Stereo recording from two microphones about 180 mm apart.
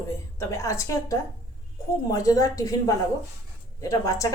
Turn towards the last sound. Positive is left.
turn(degrees=20)  # may be behind; listen again after turning